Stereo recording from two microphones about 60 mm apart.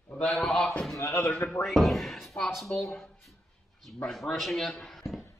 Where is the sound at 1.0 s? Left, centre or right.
Left.